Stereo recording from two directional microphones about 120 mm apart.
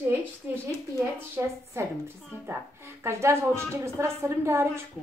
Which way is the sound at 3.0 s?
20° right (ahead or behind).